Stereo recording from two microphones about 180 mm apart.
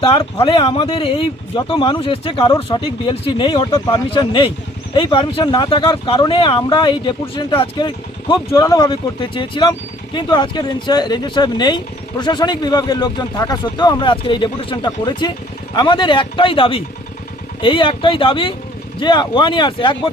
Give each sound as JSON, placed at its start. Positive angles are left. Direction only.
{"t": 0.0, "sound": "speech", "side_deg": 30}